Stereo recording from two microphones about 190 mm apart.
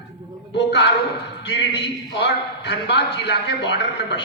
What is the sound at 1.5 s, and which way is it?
A man's voice, 65° left (ahead or behind).